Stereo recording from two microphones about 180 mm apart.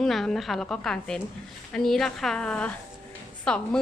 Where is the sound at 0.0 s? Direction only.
Centre (ahead or behind).